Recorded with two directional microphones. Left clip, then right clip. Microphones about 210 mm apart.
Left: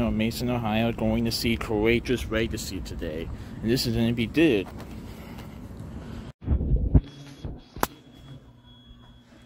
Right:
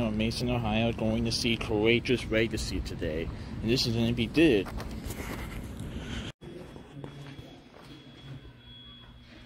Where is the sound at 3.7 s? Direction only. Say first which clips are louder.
Left 2 dB; 25° left (ahead or behind); by 4.9 s 5° left (ahead or behind).